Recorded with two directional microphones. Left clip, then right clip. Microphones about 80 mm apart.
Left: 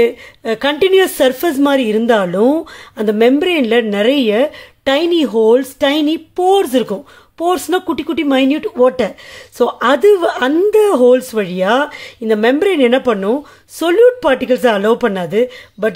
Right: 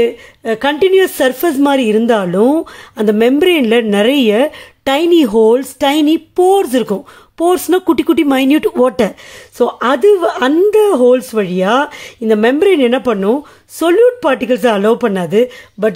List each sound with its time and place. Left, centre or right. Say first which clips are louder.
0.0 s speech: even; centre; by 7.9 s right
7.9 s speech: right 5 dB; right
8.8 s speech: left 5 dB; right
9.6 s speech: even; centre
10.9 s speech: even; centre
11.4 s speech: right 1 dB; right